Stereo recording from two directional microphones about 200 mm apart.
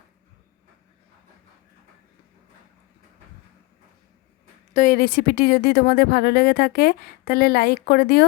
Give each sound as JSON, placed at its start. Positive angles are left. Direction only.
{"t": 4.7, "sound": "speech", "side_deg": 40}